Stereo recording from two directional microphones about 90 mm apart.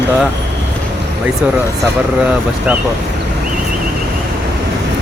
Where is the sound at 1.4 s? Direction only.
15° right (ahead or behind).